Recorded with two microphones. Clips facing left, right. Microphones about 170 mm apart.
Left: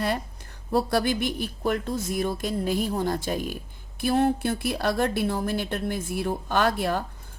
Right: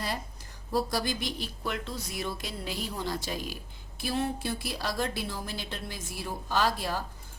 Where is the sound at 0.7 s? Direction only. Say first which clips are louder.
Left 6 dB; 60° left (ahead or behind).